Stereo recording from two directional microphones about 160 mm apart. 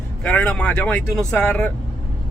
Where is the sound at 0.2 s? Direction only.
10° left (ahead or behind).